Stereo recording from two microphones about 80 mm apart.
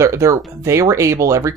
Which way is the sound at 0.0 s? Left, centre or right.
Right.